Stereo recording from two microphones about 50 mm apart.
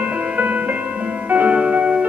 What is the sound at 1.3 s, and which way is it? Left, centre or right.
Music, right.